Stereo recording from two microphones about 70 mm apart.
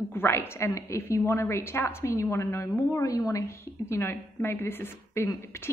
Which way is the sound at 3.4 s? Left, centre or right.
Left.